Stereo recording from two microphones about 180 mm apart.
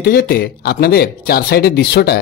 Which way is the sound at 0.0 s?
55° left (ahead or behind).